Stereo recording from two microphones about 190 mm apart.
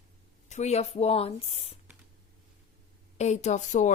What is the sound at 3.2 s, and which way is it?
Speech, 35° left (ahead or behind).